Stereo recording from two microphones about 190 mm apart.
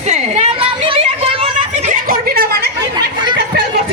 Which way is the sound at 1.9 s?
50° right (ahead or behind).